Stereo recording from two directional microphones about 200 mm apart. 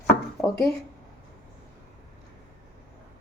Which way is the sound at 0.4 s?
Centre (ahead or behind).